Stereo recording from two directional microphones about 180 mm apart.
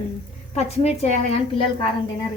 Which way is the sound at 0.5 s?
35° left (ahead or behind).